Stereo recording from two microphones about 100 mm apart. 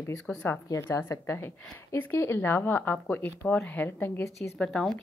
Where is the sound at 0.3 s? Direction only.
20° left (ahead or behind).